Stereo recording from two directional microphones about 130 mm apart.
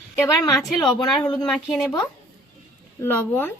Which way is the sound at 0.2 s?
30° left (ahead or behind).